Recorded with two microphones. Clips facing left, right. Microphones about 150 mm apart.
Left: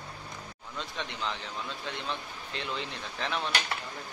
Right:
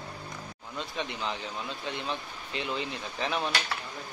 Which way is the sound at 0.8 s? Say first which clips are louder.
Right 2 dB; 5° right (ahead or behind).